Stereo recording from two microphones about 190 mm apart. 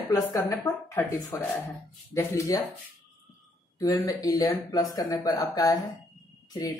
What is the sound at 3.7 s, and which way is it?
Speech, 20° left (ahead or behind).